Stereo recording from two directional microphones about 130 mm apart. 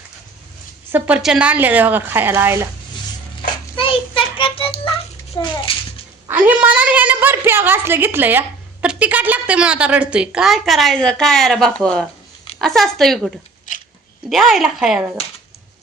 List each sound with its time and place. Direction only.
0.9 s speech: 10° right (ahead or behind)
3.8 s music: 40° left (ahead or behind)
5.4 s a sound: 40° left (ahead or behind)
6.2 s a woman's voice: 15° right (ahead or behind)